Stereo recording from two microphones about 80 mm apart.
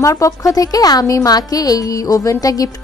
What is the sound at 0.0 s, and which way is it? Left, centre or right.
A woman's voice, left.